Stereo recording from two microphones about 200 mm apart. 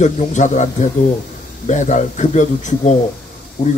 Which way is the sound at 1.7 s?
40° left (ahead or behind).